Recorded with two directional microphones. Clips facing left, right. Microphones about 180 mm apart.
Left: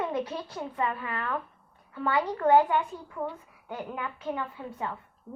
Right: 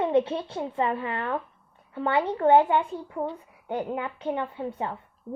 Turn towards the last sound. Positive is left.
turn(degrees=-30)  # may be behind; listen again after turning